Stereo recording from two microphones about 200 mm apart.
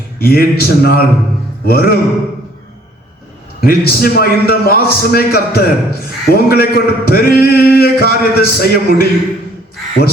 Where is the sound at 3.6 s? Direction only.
50° left (ahead or behind).